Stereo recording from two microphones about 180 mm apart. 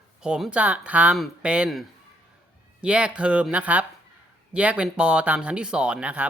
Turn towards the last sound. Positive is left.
turn(degrees=-5)  # may be behind; listen again after turning